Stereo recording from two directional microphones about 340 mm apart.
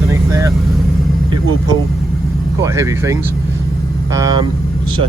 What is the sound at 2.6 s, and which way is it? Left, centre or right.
Speech, centre.